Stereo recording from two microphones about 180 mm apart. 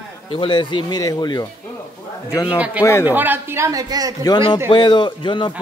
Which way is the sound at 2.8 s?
15° left (ahead or behind).